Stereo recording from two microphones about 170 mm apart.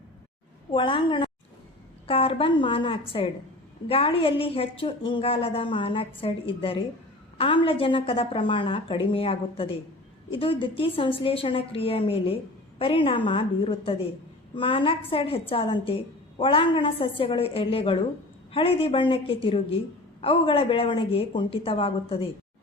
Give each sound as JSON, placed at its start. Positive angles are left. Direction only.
{"t": 0.7, "sound": "a woman's voice", "side_deg": 30}